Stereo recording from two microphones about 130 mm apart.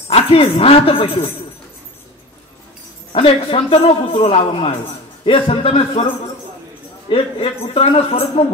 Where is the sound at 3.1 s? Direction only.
45° left (ahead or behind).